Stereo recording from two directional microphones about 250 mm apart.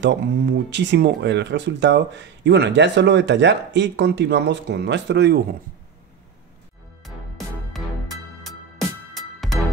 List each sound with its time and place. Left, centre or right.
0.0 s speech: right
7.7 s music: centre